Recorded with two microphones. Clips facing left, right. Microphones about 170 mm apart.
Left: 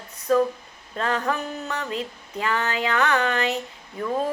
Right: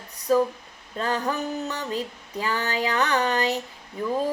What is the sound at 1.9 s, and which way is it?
Female singing, 35° right (ahead or behind).